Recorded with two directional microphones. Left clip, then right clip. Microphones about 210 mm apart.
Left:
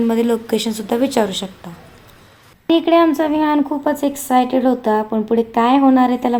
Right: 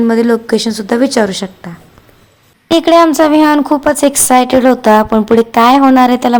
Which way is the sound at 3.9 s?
20° right (ahead or behind).